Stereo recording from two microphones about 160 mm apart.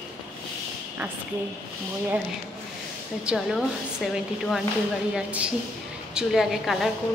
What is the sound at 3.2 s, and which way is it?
A man's voice, centre (ahead or behind).